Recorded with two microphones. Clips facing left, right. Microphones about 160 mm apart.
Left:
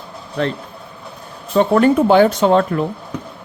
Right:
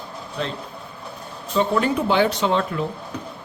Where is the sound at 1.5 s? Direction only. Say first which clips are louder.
Left 7 dB; 55° left (ahead or behind).